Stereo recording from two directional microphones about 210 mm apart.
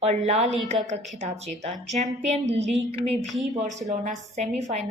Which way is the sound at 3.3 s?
Centre (ahead or behind).